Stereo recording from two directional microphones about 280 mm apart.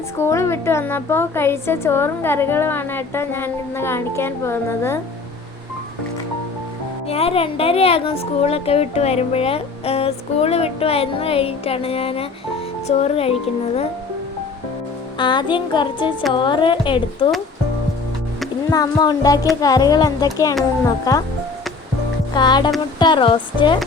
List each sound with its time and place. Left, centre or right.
0.2 s a woman's voice: centre
7.1 s a woman's voice: centre
15.2 s a woman's voice: centre
18.7 s a woman's voice: centre
22.4 s a woman's voice: centre